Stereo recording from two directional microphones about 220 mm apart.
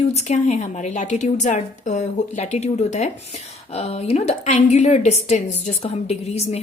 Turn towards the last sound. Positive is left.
turn(degrees=30)  # may be behind; listen again after turning